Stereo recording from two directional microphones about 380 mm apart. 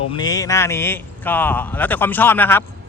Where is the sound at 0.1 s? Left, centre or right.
Centre.